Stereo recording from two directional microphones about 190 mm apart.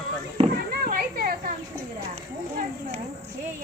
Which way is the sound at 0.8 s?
50° right (ahead or behind).